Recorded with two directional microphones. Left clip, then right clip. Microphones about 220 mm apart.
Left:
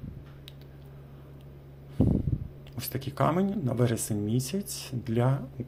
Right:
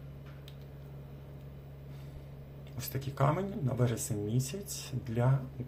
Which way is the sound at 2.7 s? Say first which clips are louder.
Left 5 dB; 35° left (ahead or behind).